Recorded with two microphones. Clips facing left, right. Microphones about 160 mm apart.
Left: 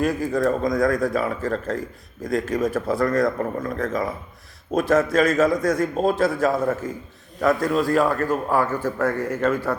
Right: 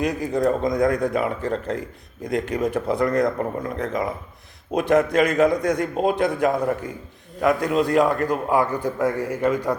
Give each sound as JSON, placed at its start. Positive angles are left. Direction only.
{"t": 0.0, "sound": "a man's voice", "side_deg": -20}